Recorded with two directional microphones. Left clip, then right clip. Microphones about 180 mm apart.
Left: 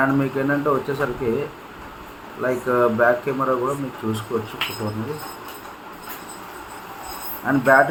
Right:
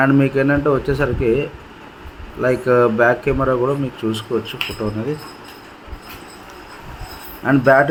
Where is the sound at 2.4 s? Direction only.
50° right (ahead or behind).